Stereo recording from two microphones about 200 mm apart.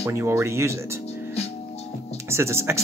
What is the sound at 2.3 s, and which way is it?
Speech, 15° right (ahead or behind).